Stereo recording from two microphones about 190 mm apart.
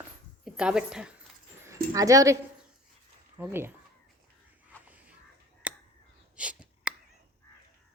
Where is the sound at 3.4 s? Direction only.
10° right (ahead or behind).